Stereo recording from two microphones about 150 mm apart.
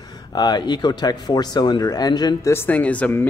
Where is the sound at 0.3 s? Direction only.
30° left (ahead or behind).